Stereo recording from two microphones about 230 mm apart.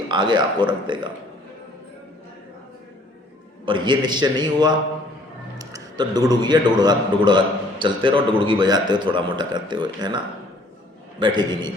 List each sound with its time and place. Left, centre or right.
0.1 s a man's voice: centre
3.7 s a man's voice: centre
11.2 s a man's voice: centre